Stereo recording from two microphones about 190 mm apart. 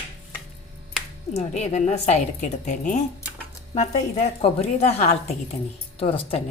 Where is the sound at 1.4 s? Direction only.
35° left (ahead or behind).